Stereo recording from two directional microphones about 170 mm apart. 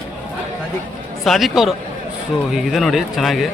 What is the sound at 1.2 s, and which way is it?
Speech, centre (ahead or behind).